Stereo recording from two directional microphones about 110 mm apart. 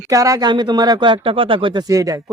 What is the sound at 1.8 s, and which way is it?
Speech, 30° right (ahead or behind).